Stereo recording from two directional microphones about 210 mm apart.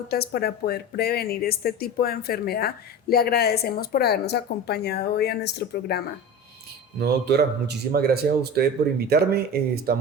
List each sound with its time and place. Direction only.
0.1 s speech: 50° left (ahead or behind)
7.0 s speech: 50° right (ahead or behind)